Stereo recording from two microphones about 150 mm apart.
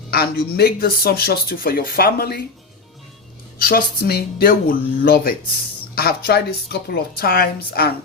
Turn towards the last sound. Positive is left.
turn(degrees=90)